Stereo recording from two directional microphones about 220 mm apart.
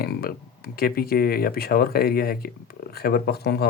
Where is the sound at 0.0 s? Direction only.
45° left (ahead or behind).